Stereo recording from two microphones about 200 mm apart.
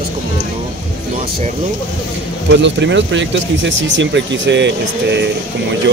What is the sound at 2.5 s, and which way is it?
Speech, 65° right (ahead or behind).